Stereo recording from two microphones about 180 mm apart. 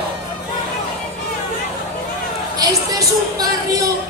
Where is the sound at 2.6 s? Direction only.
20° right (ahead or behind).